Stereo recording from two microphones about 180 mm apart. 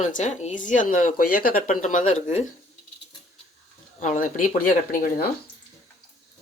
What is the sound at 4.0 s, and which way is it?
Speech, 45° left (ahead or behind).